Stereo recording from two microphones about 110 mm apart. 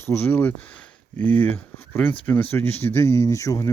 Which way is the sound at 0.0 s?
20° left (ahead or behind).